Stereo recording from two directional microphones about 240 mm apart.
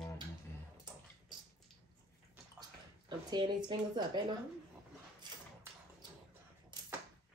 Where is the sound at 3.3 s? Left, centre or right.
Centre.